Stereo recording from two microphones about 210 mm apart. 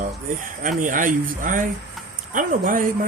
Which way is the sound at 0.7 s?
40° right (ahead or behind).